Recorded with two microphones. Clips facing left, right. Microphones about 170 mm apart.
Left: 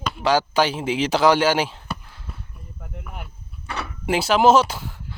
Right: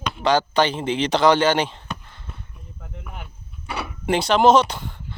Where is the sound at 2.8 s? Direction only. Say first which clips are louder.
Left 1 dB; 5° left (ahead or behind).